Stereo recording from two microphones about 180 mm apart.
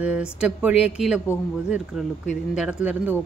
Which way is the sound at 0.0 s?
5° right (ahead or behind).